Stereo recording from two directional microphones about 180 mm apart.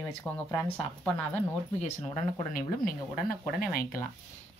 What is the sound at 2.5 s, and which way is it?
Speech, 50° left (ahead or behind).